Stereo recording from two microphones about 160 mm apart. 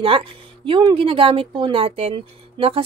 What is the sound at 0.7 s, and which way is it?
Speech, 30° right (ahead or behind).